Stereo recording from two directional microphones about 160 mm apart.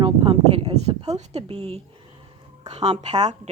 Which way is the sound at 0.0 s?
30° right (ahead or behind).